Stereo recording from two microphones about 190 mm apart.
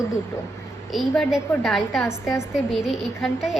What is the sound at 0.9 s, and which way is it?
A woman's voice, centre (ahead or behind).